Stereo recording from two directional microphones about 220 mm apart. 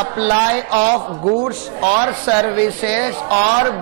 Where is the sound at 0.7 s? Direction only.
25° right (ahead or behind).